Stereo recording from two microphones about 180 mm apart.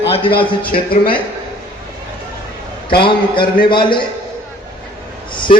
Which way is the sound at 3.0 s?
30° left (ahead or behind).